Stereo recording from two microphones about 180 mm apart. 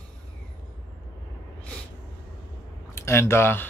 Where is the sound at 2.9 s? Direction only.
15° left (ahead or behind).